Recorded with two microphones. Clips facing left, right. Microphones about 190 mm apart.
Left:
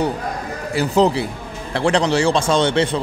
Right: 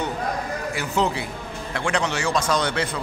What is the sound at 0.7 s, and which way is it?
A man's voice, 35° left (ahead or behind).